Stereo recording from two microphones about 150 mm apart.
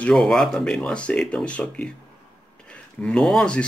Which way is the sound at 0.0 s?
5° left (ahead or behind).